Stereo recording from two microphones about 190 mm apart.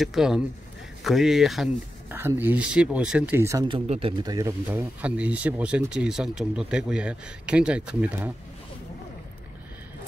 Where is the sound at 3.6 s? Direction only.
30° right (ahead or behind).